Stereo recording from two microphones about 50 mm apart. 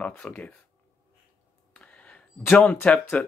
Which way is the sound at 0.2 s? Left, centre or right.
Left.